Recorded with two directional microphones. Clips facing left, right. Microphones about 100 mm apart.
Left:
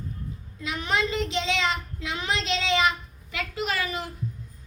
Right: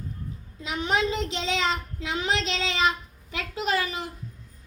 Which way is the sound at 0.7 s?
25° right (ahead or behind).